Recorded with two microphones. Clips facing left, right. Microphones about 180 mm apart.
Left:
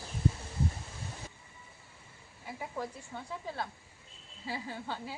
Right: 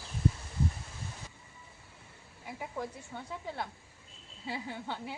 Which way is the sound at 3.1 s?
Centre (ahead or behind).